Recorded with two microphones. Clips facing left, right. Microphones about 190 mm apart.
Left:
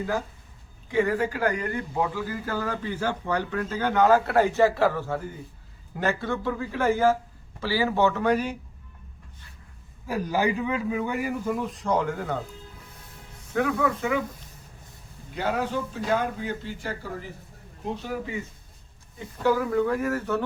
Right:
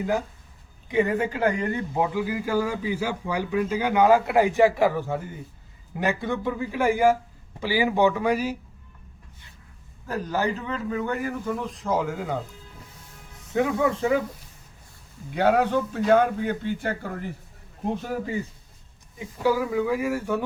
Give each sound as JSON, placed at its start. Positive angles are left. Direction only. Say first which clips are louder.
{"t": 0.9, "sound": "a man's voice", "louder": "right 1 dB", "side_deg": -20}
{"t": 10.1, "sound": "a man's voice", "louder": "left 1 dB", "side_deg": 10}
{"t": 13.5, "sound": "speech", "louder": "right 2 dB", "side_deg": -20}
{"t": 15.4, "sound": "a man's voice", "louder": "right 6 dB", "side_deg": -60}
{"t": 19.2, "sound": "a man's voice", "louder": "even", "side_deg": -10}